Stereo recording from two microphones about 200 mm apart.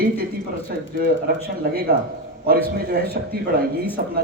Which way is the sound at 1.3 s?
50° right (ahead or behind).